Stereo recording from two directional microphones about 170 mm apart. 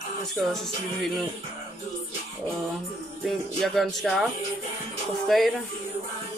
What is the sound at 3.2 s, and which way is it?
Speech, centre (ahead or behind).